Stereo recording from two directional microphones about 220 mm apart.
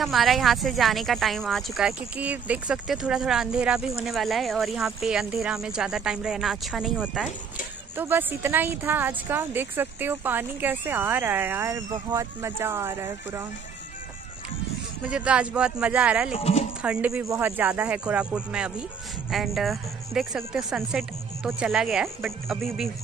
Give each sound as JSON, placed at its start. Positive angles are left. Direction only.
{"t": 0.0, "sound": "speech", "side_deg": 0}
{"t": 15.0, "sound": "speech", "side_deg": -5}
{"t": 16.3, "sound": "speech", "side_deg": 30}
{"t": 16.8, "sound": "speech", "side_deg": -5}